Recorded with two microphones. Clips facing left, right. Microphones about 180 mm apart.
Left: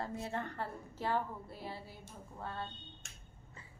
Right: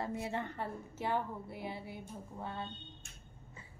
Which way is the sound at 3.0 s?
90° left.